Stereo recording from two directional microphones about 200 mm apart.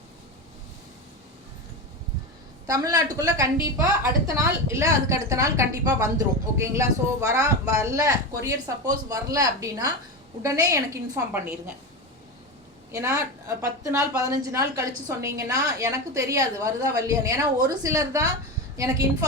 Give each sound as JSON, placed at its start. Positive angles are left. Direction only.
{"t": 2.6, "sound": "a woman's voice", "side_deg": -20}
{"t": 12.9, "sound": "a woman's voice", "side_deg": -15}